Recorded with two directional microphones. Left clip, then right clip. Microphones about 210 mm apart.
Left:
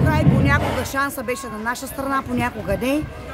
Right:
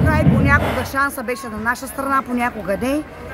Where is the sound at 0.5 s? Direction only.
10° left (ahead or behind).